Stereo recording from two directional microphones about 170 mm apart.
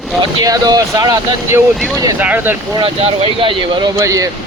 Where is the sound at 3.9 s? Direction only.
20° right (ahead or behind).